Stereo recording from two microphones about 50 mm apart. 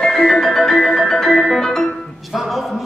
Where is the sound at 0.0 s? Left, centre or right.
Centre.